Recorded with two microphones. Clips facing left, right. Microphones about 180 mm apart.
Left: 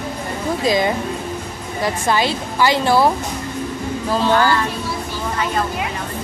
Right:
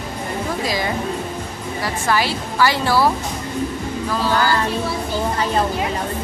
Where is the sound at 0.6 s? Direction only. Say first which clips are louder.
Left 8 dB; 20° left (ahead or behind).